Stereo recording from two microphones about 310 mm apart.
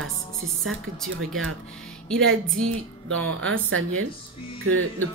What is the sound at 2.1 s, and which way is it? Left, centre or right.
Music, centre.